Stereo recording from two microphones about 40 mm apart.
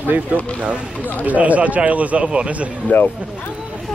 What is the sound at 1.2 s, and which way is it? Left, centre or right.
Speech, right.